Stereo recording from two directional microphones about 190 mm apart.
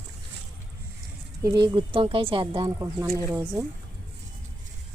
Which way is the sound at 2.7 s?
15° right (ahead or behind).